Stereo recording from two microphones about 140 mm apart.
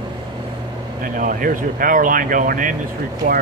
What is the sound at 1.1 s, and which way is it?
Speech, 75° right (ahead or behind).